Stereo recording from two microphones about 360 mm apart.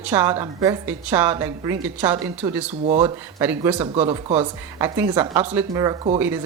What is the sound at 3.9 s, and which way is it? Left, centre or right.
Speech, centre.